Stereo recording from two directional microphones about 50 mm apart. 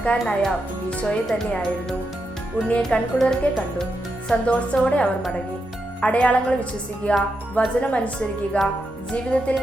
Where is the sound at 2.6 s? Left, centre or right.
Left.